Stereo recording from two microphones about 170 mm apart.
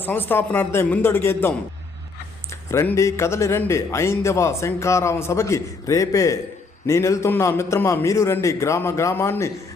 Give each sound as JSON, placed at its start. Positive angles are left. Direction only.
{"t": 0.0, "sound": "a man's voice", "side_deg": 10}